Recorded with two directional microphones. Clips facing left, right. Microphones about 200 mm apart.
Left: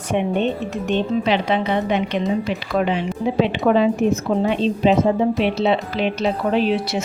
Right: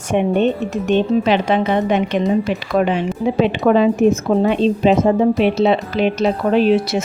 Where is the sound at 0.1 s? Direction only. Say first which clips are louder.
Right 4 dB; 45° right (ahead or behind).